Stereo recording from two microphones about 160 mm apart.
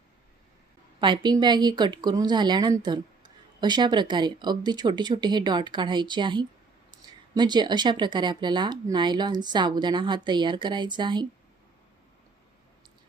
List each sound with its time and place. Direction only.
1.0 s speech: 30° right (ahead or behind)
6.9 s a sound: 30° right (ahead or behind)
7.3 s speech: 25° right (ahead or behind)